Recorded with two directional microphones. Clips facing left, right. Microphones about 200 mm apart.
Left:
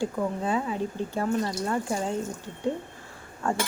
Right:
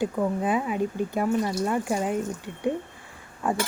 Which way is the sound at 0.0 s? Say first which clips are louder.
Right 3 dB; 15° right (ahead or behind).